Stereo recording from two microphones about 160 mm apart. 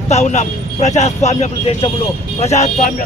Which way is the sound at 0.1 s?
45° left (ahead or behind).